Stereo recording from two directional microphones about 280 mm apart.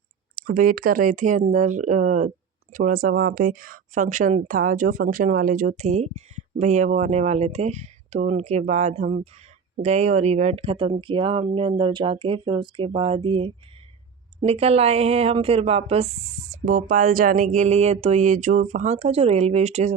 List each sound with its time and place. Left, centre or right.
0.3 s speech: right